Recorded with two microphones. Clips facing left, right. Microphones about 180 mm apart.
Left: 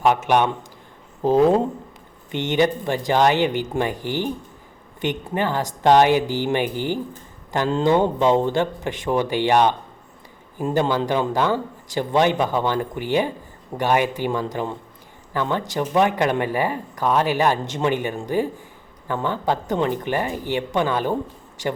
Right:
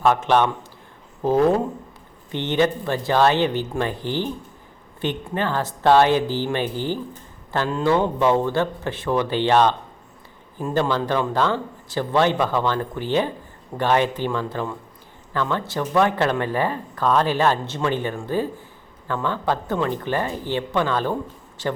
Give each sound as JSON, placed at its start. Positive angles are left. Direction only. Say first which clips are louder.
{"t": 0.0, "sound": "speech", "louder": "even", "side_deg": 15}